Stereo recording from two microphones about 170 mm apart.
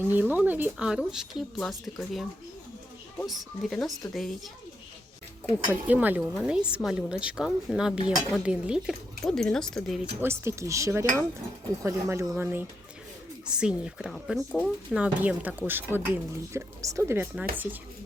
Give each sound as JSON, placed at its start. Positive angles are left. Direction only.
{"t": 0.0, "sound": "a woman's voice", "side_deg": -10}
{"t": 3.2, "sound": "a woman's voice", "side_deg": 0}
{"t": 5.7, "sound": "a woman's voice", "side_deg": -10}
{"t": 10.2, "sound": "a woman's voice", "side_deg": -15}